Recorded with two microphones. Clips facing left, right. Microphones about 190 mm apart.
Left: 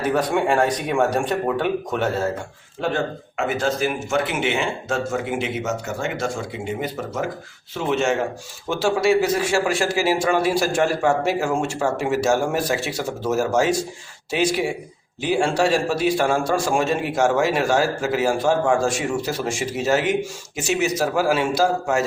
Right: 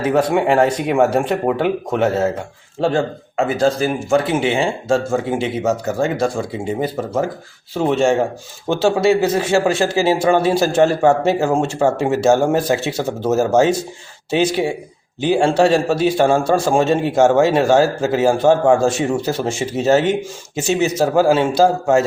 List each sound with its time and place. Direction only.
0.0 s a man's voice: 25° right (ahead or behind)
2.8 s a man's voice: 30° right (ahead or behind)